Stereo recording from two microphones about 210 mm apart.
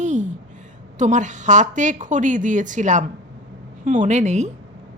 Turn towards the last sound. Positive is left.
turn(degrees=-35)  # may be behind; listen again after turning